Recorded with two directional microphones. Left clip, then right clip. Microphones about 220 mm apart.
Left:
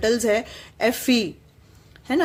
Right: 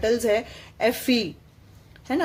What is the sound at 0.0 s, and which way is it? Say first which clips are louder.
Speech: left 1 dB; 20° left (ahead or behind).